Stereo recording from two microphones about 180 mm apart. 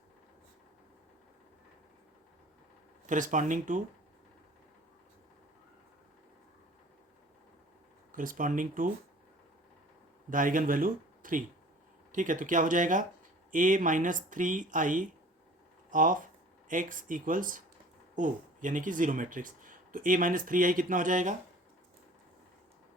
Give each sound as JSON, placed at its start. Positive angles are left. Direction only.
{"t": 3.1, "sound": "speech", "side_deg": -45}
{"t": 8.1, "sound": "speech", "side_deg": -50}
{"t": 10.2, "sound": "speech", "side_deg": -50}